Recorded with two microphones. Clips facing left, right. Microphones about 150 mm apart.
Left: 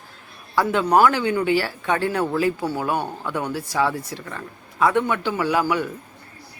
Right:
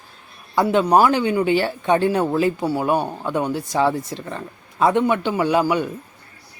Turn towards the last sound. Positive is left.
turn(degrees=-20)  # may be behind; listen again after turning